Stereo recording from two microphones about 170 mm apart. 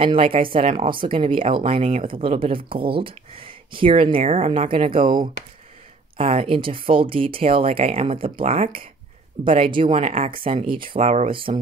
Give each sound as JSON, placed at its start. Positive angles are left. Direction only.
{"t": 0.0, "sound": "speech", "side_deg": -30}
{"t": 9.8, "sound": "speech", "side_deg": -40}